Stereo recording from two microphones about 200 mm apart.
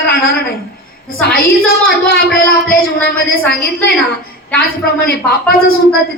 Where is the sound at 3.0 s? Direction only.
50° left (ahead or behind).